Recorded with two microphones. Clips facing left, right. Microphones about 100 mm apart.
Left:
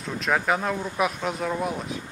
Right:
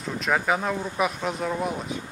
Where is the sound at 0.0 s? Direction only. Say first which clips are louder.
Even; centre (ahead or behind).